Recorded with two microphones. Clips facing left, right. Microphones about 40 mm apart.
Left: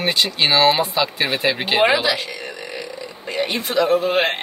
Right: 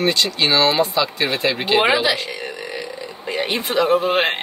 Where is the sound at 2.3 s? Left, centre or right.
Centre.